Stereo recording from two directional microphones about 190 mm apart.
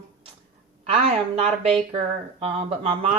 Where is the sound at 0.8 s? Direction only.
30° right (ahead or behind).